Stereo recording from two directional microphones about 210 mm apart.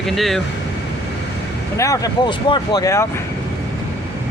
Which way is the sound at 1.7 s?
15° left (ahead or behind).